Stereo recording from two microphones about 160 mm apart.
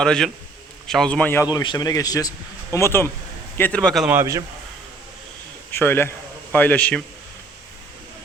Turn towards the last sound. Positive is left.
turn(degrees=5)  # may be behind; listen again after turning